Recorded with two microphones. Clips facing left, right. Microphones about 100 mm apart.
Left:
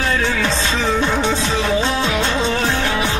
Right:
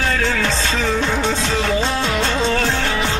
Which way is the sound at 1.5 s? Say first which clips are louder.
Left 1 dB; 20° left (ahead or behind).